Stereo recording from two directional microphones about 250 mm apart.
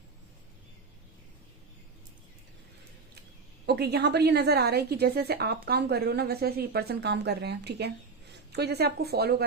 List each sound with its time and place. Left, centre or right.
3.7 s a woman's voice: right